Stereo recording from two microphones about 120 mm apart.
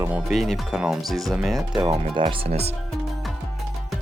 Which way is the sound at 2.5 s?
60° right (ahead or behind).